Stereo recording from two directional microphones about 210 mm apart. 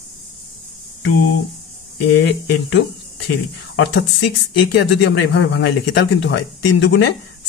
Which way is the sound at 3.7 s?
55° left (ahead or behind).